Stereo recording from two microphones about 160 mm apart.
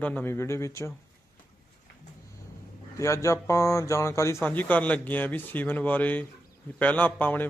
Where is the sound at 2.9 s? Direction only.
20° left (ahead or behind).